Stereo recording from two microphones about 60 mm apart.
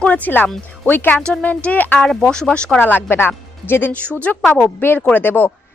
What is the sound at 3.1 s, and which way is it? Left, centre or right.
Speech, left.